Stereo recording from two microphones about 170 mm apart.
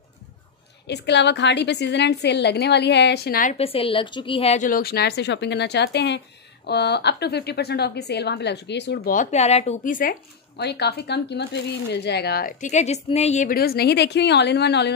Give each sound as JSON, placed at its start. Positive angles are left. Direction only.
{"t": 0.8, "sound": "speech", "side_deg": 90}
{"t": 3.5, "sound": "a woman's voice", "side_deg": 35}
{"t": 4.6, "sound": "speech", "side_deg": 60}
{"t": 9.1, "sound": "a woman's voice", "side_deg": 45}
{"t": 10.6, "sound": "speech", "side_deg": 75}
{"t": 13.6, "sound": "speech", "side_deg": 65}